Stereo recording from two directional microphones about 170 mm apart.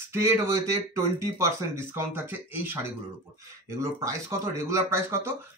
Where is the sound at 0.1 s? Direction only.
15° right (ahead or behind).